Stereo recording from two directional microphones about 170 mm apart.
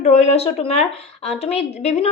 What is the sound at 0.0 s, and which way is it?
A woman's voice, 40° left (ahead or behind).